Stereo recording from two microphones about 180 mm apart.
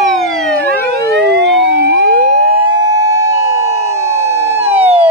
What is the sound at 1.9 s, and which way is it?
Emergency vehicle, 45° left (ahead or behind).